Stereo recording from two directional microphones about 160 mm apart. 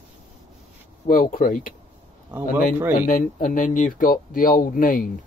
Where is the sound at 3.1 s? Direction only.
55° left (ahead or behind).